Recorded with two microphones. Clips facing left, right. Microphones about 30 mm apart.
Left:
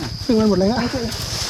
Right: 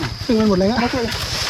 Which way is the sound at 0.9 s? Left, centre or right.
Right.